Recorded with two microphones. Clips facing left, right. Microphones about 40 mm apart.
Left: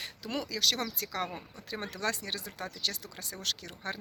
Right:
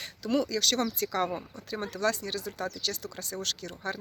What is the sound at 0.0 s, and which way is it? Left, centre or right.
Speech, centre.